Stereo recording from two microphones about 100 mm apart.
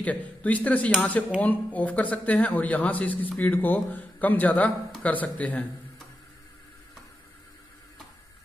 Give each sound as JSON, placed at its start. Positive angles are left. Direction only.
{"t": 0.0, "sound": "speech", "side_deg": 15}